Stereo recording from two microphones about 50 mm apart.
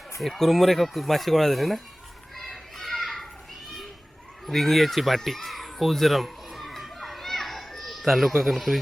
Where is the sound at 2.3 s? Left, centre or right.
Centre.